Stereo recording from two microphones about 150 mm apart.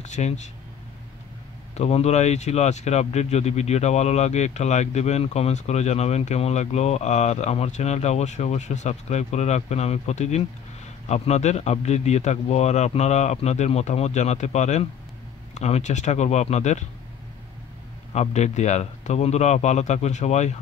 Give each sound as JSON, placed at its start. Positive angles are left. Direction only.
{"t": 0.0, "sound": "speech", "side_deg": 50}
{"t": 1.8, "sound": "speech", "side_deg": 45}
{"t": 18.1, "sound": "speech", "side_deg": 50}